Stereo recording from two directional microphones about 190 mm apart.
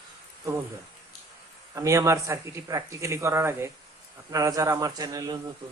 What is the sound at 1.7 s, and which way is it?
Speech, 15° right (ahead or behind).